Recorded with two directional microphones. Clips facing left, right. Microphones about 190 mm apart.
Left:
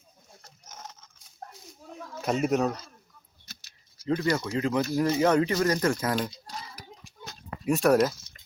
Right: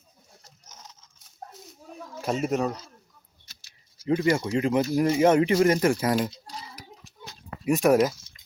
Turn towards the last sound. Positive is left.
turn(degrees=-15)  # may be behind; listen again after turning